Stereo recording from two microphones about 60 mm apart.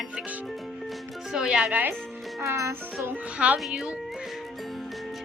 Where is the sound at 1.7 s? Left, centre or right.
Right.